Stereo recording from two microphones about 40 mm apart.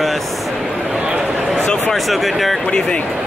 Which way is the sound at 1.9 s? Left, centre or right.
Centre.